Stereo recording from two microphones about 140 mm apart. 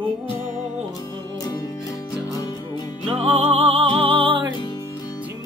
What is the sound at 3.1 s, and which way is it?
Music, 45° right (ahead or behind).